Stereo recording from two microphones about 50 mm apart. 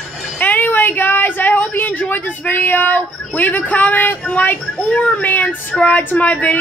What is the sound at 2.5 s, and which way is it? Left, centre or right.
Female singing, left.